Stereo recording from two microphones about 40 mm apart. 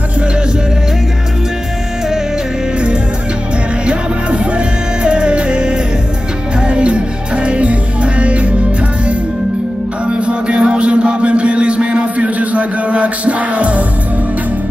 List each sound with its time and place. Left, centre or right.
3.8 s music: right
10.0 s music: right